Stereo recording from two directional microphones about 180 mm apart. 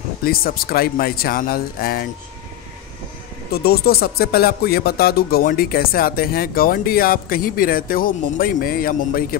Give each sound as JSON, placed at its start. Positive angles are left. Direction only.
{"t": 0.2, "sound": "speech", "side_deg": 55}
{"t": 3.5, "sound": "speech", "side_deg": 60}